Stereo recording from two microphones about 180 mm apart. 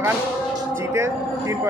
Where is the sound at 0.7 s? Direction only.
15° right (ahead or behind).